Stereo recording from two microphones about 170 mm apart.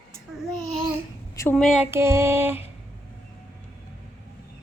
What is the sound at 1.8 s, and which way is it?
Speech, 15° right (ahead or behind).